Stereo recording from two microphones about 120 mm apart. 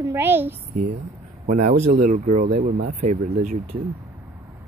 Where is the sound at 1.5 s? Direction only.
90° right.